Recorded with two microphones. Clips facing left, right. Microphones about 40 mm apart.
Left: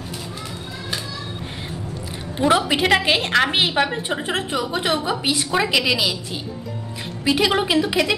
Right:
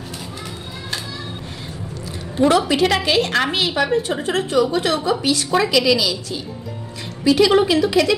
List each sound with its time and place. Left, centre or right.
2.3 s a woman's voice: centre